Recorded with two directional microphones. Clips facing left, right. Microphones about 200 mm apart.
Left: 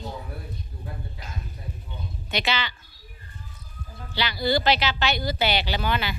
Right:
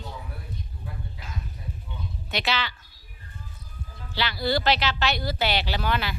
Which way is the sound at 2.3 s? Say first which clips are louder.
Left 1 dB; centre (ahead or behind).